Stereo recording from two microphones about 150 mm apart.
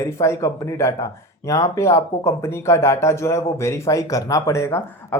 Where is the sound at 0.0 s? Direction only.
20° left (ahead or behind).